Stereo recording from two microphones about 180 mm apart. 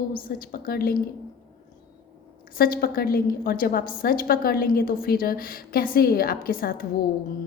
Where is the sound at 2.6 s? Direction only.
55° left (ahead or behind).